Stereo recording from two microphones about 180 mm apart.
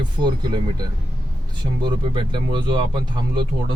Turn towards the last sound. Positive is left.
turn(degrees=-25)  # may be behind; listen again after turning